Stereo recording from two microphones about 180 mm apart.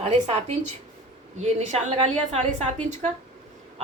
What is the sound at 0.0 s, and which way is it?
A woman's voice, 35° right (ahead or behind).